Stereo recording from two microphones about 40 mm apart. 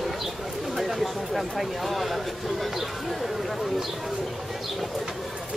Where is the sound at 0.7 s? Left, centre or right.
Centre.